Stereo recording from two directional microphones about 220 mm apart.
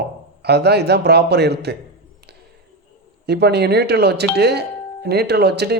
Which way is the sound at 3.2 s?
50° right (ahead or behind).